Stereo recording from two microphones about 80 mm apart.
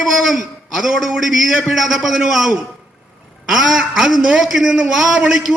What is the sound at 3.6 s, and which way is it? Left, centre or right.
A man's voice, centre.